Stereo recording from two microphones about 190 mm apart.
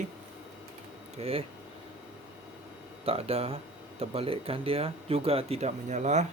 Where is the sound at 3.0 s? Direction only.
30° right (ahead or behind).